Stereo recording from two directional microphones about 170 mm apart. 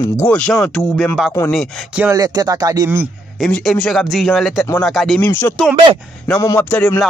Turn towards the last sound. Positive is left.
turn(degrees=10)  # may be behind; listen again after turning